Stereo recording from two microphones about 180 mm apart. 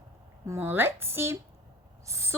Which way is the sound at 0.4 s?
10° right (ahead or behind).